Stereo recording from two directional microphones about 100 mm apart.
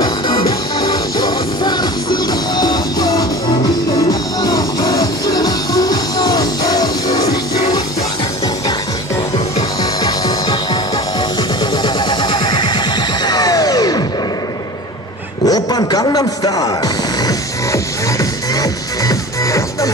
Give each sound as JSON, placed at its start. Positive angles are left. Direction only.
{"t": 0.0, "sound": "music", "side_deg": 40}
{"t": 9.6, "sound": "music", "side_deg": 40}
{"t": 15.4, "sound": "music", "side_deg": 40}
{"t": 18.6, "sound": "music", "side_deg": 35}